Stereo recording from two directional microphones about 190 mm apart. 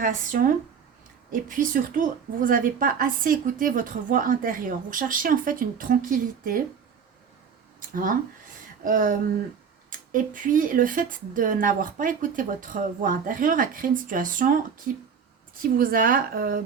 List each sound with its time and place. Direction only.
0.0 s a woman's voice: 45° right (ahead or behind)
7.8 s a woman's voice: 45° right (ahead or behind)
15.6 s a woman's voice: 50° right (ahead or behind)